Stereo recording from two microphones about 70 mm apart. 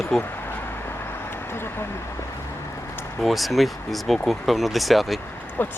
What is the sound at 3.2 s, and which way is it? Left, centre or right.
Speech, centre.